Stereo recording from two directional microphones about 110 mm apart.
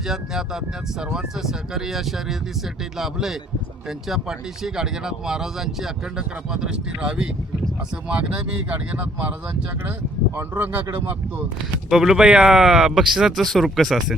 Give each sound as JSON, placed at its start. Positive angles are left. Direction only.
{"t": 0.1, "sound": "speech", "side_deg": -5}
{"t": 10.3, "sound": "speech", "side_deg": -20}
{"t": 11.9, "sound": "speech", "side_deg": -5}